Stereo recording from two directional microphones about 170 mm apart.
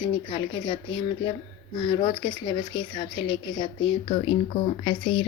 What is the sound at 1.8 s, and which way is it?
A woman's voice, 25° left (ahead or behind).